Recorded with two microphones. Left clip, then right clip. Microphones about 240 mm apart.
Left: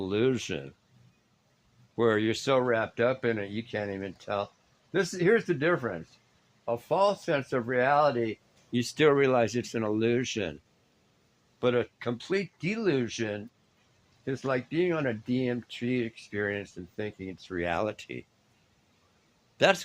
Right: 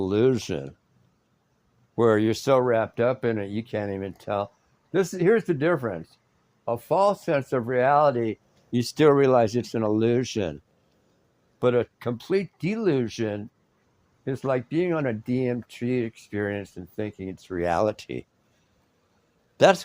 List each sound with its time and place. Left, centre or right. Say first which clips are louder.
0.0 s speech: right 5 dB; right
2.0 s speech: right 5 dB; right
11.6 s speech: right 4 dB; right
19.5 s speech: right 6 dB; right